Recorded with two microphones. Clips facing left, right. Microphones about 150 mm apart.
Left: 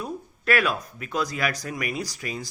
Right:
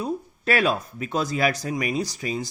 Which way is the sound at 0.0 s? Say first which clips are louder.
Right 4 dB; 30° right (ahead or behind).